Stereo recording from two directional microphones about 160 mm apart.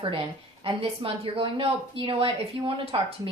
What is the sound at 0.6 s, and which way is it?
A woman's voice, 35° right (ahead or behind).